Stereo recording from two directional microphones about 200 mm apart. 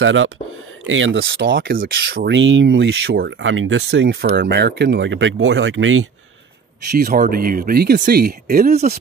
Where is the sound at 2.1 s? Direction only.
65° right (ahead or behind).